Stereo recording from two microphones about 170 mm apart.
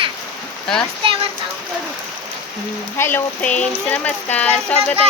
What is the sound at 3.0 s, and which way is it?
Speech, 10° left (ahead or behind).